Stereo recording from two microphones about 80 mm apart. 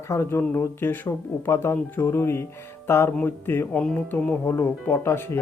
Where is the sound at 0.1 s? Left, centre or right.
Left.